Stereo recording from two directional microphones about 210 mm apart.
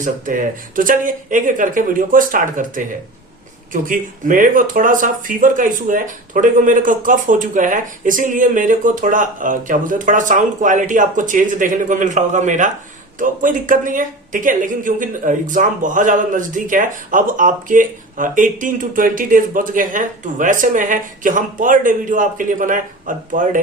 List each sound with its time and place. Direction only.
0.0 s speech: 40° right (ahead or behind)